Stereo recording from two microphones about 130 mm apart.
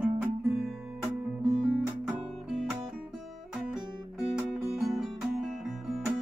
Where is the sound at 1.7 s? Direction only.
10° right (ahead or behind).